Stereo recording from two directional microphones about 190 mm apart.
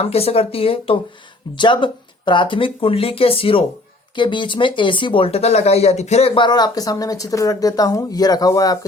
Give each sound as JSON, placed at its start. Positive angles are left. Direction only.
{"t": 0.0, "sound": "speech", "side_deg": 30}